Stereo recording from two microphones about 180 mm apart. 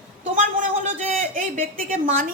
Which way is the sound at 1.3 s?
50° right (ahead or behind).